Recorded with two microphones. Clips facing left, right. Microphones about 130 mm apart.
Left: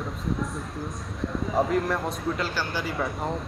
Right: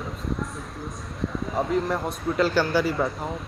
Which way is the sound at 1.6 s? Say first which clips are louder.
Even; centre (ahead or behind).